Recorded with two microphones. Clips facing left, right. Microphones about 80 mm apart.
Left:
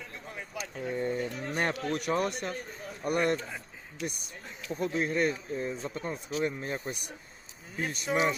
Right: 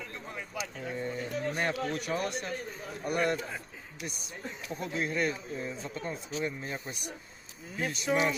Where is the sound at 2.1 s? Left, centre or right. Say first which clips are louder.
Left 3 dB; left.